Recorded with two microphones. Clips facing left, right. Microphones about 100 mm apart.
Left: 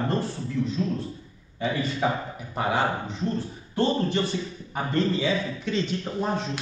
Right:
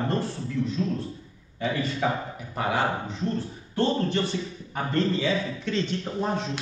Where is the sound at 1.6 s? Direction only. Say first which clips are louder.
Even; 30° left (ahead or behind).